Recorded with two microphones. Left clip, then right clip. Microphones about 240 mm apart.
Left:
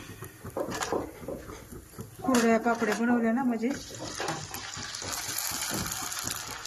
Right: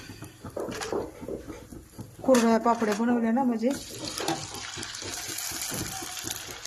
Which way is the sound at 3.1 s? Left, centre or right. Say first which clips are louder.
Right 2 dB; centre.